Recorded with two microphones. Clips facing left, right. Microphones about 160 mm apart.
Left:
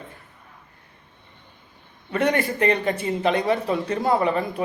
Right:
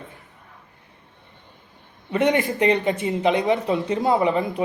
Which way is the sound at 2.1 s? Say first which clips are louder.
Right 2 dB; 20° right (ahead or behind).